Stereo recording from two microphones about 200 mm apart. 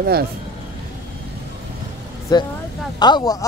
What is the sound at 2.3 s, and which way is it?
Speech, 20° left (ahead or behind).